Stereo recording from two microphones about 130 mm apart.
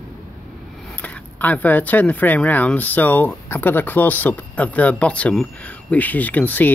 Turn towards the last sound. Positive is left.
turn(degrees=15)  # may be behind; listen again after turning